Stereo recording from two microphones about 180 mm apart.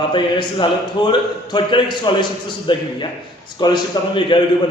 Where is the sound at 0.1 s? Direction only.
25° left (ahead or behind).